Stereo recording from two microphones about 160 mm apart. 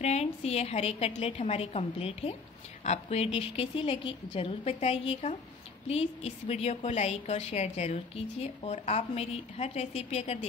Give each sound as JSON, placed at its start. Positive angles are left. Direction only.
{"t": 0.0, "sound": "a woman's voice", "side_deg": 45}